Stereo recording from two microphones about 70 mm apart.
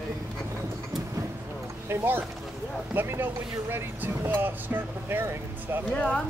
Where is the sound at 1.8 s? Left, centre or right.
Right.